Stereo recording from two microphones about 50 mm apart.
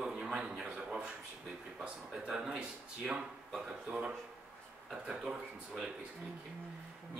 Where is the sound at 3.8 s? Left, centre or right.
Right.